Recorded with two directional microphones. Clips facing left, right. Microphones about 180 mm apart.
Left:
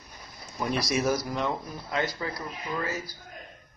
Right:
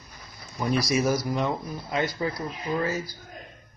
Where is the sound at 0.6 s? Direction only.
Centre (ahead or behind).